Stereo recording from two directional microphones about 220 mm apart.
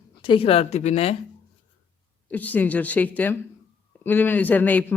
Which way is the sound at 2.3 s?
5° left (ahead or behind).